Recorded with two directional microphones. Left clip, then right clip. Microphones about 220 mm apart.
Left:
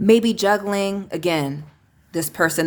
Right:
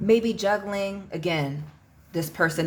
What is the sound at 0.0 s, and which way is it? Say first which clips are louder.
A woman's voice: left 5 dB; 45° left (ahead or behind).